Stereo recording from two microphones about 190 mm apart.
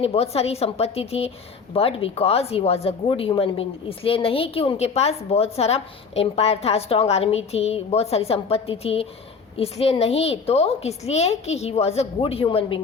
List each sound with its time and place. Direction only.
0.0 s a woman's voice: 30° left (ahead or behind)